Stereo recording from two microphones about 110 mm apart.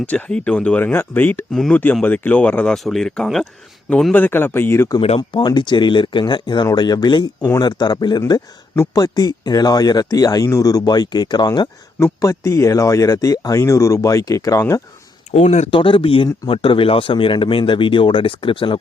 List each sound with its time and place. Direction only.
0.0 s speech: 10° left (ahead or behind)
4.1 s speech: 20° left (ahead or behind)
4.9 s speech: 60° left (ahead or behind)
5.4 s speech: 45° left (ahead or behind)
11.9 s speech: 25° left (ahead or behind)
15.3 s speech: 90° left
15.7 s speech: 55° left (ahead or behind)